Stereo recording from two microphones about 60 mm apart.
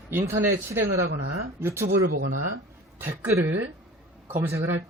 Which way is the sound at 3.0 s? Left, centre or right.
Right.